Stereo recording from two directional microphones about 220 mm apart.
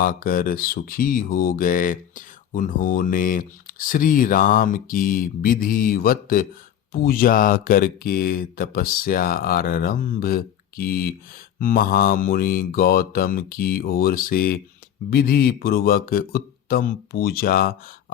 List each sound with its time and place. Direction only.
0.0 s mantra: 40° left (ahead or behind)
15.1 s speech: 45° left (ahead or behind)